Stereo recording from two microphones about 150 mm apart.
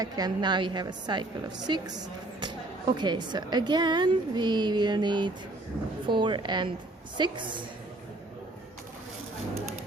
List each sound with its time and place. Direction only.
0.0 s a woman's voice: 30° right (ahead or behind)